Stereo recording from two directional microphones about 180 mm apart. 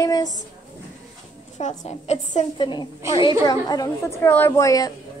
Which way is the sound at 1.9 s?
40° left (ahead or behind).